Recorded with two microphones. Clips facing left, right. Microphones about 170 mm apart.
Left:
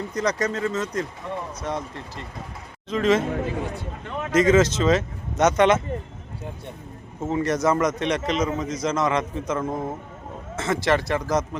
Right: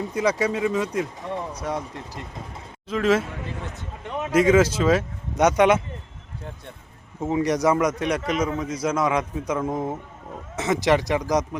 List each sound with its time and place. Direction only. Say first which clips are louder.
0.1 s a man's voice: right 2 dB; 5° right (ahead or behind)
3.2 s a man's voice: left 9 dB; 50° left (ahead or behind)
4.0 s speech: right 1 dB; 20° right (ahead or behind)
7.2 s speech: right 1 dB; 15° right (ahead or behind)